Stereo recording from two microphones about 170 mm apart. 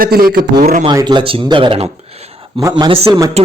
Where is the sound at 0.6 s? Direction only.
40° right (ahead or behind).